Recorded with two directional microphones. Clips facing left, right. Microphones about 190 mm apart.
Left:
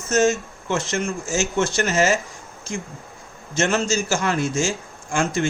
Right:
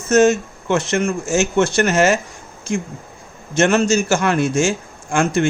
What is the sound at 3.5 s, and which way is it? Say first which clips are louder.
Speech: right 6 dB; 60° right (ahead or behind).